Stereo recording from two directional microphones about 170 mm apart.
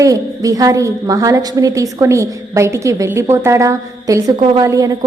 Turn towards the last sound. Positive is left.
turn(degrees=-20)  # may be behind; listen again after turning